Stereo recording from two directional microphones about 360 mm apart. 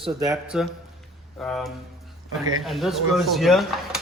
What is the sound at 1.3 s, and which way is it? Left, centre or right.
Mantra, centre.